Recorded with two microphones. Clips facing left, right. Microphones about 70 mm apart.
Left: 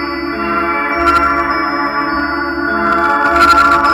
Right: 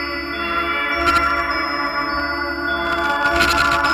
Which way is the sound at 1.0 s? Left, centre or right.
Left.